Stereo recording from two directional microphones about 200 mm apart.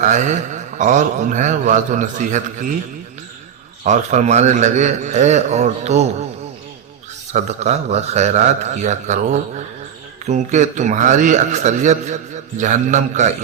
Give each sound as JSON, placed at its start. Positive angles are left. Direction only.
{"t": 0.0, "sound": "a man's voice", "side_deg": -35}
{"t": 3.8, "sound": "a man's voice", "side_deg": -35}
{"t": 7.3, "sound": "a man's voice", "side_deg": -35}